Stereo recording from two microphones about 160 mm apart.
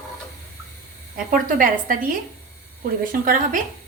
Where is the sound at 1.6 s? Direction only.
60° right (ahead or behind).